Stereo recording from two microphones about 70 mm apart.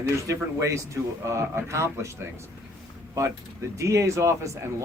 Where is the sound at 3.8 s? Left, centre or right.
Right.